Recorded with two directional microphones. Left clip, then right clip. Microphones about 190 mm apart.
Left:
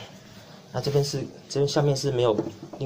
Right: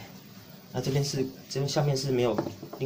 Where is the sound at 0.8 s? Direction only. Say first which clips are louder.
Left 4 dB; 30° left (ahead or behind).